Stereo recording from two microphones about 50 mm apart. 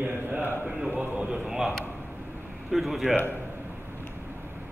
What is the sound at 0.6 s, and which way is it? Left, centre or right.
A man's voice, centre.